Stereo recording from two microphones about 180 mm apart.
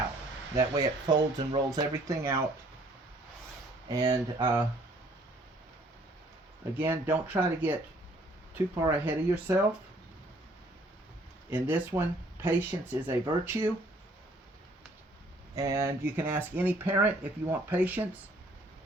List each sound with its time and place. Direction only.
0.5 s speech: 20° right (ahead or behind)
3.8 s speech: 20° right (ahead or behind)
6.7 s speech: 10° right (ahead or behind)
11.5 s speech: 10° right (ahead or behind)
15.5 s speech: 15° right (ahead or behind)